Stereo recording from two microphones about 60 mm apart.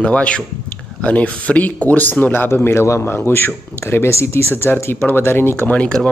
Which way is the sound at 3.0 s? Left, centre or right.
Left.